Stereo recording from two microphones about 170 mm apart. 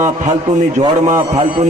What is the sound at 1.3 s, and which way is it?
Speech, 40° right (ahead or behind).